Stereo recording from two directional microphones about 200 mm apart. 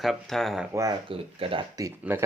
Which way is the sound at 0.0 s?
Centre (ahead or behind).